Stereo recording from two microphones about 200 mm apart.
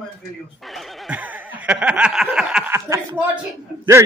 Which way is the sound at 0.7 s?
Centre (ahead or behind).